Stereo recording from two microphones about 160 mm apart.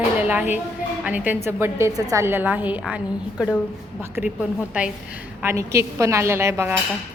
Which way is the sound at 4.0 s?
15° right (ahead or behind).